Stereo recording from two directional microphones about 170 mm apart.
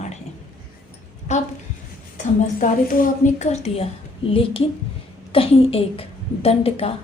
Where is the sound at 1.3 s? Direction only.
45° left (ahead or behind).